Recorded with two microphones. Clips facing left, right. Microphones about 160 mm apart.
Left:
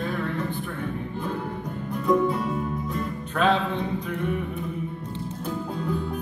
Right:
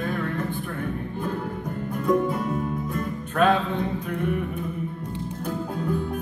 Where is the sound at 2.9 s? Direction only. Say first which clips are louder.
Right 2 dB; 50° right (ahead or behind).